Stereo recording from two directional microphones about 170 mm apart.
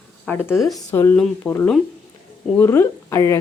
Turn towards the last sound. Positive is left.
turn(degrees=15)  # may be behind; listen again after turning